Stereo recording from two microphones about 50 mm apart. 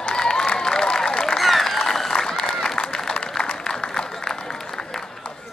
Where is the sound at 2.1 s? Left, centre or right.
Centre.